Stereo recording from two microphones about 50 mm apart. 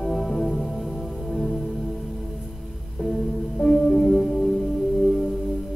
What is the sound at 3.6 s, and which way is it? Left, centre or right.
Music, centre.